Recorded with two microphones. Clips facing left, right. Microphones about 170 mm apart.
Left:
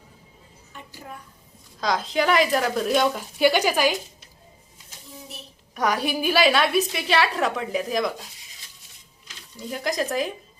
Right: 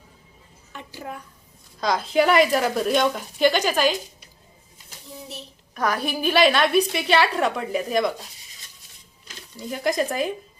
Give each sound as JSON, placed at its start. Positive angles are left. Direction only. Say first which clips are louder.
{"t": 0.7, "sound": "a sound", "louder": "right 5 dB", "side_deg": -90}
{"t": 1.8, "sound": "a woman's voice", "louder": "right 3 dB", "side_deg": 0}
{"t": 5.7, "sound": "a woman's voice", "louder": "left 1 dB", "side_deg": 15}
{"t": 9.6, "sound": "a woman's voice", "louder": "right 3 dB", "side_deg": 0}